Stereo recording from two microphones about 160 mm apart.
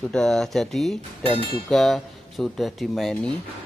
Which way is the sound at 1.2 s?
35° right (ahead or behind).